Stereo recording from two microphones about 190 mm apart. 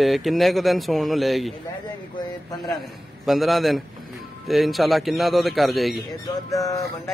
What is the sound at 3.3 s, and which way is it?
Speech, centre (ahead or behind).